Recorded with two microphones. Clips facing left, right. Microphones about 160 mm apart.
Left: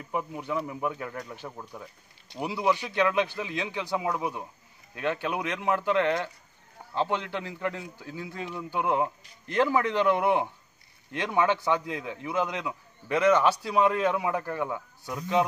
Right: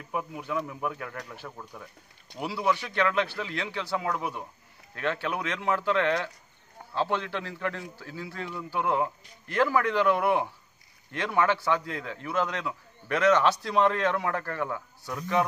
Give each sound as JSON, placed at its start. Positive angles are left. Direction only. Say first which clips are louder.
{"t": 0.1, "sound": "a man's voice", "louder": "left 1 dB", "side_deg": 0}